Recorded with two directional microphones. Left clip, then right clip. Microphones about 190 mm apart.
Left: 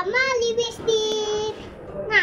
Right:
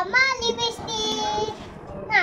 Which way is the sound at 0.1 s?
35° right (ahead or behind).